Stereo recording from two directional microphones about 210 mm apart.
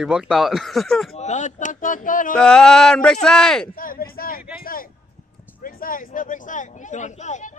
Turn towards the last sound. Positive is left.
turn(degrees=35)  # may be behind; listen again after turning